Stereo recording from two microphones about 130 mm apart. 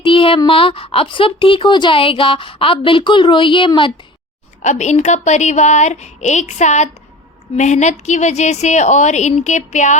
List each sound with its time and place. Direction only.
0.0 s a woman's voice: 45° left (ahead or behind)
4.6 s speech: 65° left (ahead or behind)